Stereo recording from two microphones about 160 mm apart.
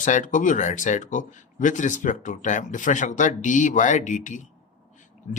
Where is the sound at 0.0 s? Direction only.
50° left (ahead or behind).